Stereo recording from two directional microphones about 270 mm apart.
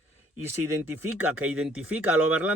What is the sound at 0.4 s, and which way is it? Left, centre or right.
Speech, centre.